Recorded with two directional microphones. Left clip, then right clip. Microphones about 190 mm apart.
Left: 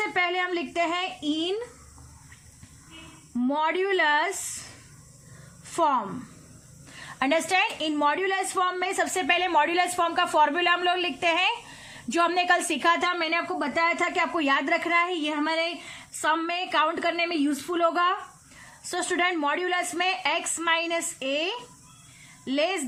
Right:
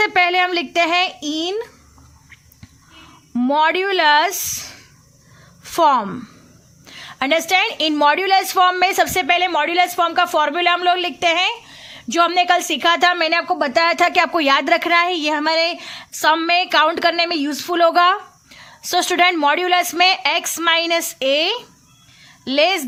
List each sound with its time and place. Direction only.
0.0 s a woman's voice: 50° right (ahead or behind)
3.3 s a woman's voice: 55° right (ahead or behind)
5.7 s a woman's voice: 50° right (ahead or behind)
6.9 s a woman's voice: 40° right (ahead or behind)